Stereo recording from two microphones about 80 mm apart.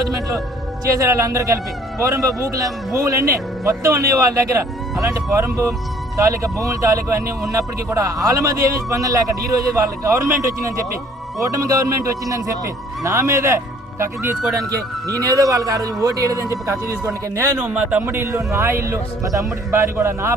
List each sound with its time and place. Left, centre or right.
0.0 s music: right
0.9 s a man's voice: right
14.5 s a man's voice: right
17.6 s a man's voice: centre; by 20.3 s right